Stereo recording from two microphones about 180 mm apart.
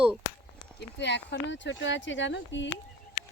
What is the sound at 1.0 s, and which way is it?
Speech, 75° left (ahead or behind).